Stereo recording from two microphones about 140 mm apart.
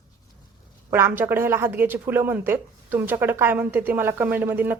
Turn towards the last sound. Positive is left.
turn(degrees=-15)  # may be behind; listen again after turning